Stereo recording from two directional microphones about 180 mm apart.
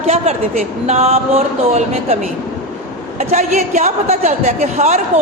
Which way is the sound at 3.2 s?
40° right (ahead or behind).